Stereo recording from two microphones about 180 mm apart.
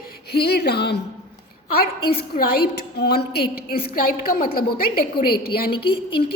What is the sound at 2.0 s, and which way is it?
Speech, 30° left (ahead or behind).